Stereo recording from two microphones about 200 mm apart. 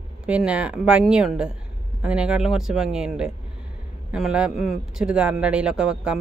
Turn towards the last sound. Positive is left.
turn(degrees=-5)  # may be behind; listen again after turning